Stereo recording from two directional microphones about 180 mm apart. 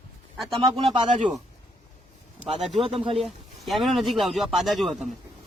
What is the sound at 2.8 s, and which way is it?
Speech, 30° right (ahead or behind).